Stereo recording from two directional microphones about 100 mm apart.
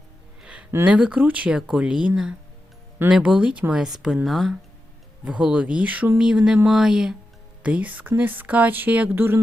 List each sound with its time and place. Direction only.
0.4 s music: 10° right (ahead or behind)
0.9 s speech: 10° right (ahead or behind)
5.2 s speech: 15° right (ahead or behind)